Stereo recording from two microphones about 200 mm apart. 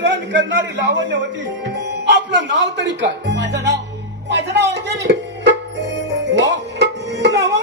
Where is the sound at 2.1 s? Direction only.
60° right (ahead or behind).